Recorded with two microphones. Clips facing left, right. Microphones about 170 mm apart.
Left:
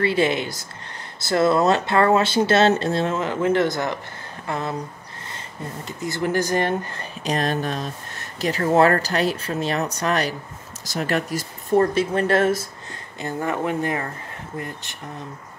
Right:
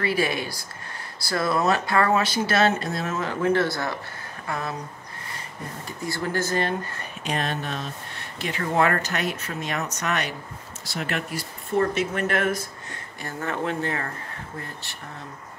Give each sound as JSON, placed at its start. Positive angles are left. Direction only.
{"t": 0.0, "sound": "speech", "side_deg": 25}
{"t": 5.9, "sound": "speech", "side_deg": 20}
{"t": 7.2, "sound": "speech", "side_deg": 40}
{"t": 13.2, "sound": "speech", "side_deg": 15}